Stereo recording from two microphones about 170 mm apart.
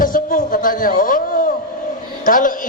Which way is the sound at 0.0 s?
55° left (ahead or behind).